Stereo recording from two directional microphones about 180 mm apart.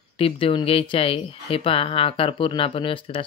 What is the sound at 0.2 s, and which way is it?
Speech, 30° left (ahead or behind).